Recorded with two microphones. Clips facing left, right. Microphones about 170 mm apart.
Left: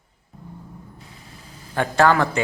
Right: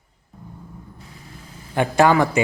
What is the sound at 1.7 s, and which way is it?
Speech, 15° right (ahead or behind).